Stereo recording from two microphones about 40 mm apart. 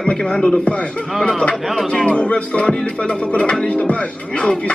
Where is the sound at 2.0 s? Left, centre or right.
Left.